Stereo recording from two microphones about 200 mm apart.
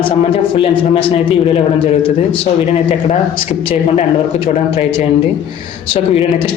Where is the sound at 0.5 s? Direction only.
25° left (ahead or behind).